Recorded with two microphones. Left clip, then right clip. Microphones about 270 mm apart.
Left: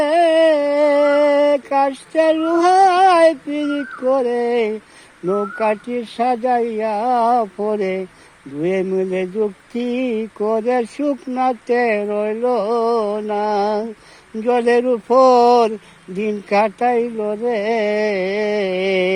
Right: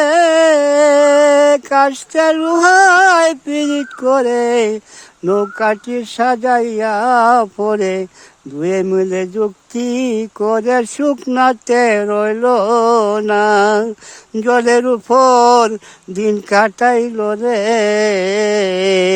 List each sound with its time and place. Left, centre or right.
0.0 s a sound: right
5.2 s speech: right
5.9 s mantra: right